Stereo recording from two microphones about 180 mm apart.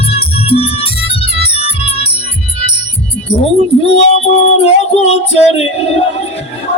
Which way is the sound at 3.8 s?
35° left (ahead or behind).